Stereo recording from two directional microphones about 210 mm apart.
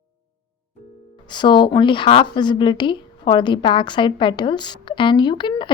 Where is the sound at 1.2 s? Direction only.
20° left (ahead or behind).